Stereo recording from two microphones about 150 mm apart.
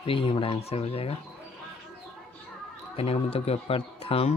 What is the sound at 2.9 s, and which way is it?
Speech, 40° left (ahead or behind).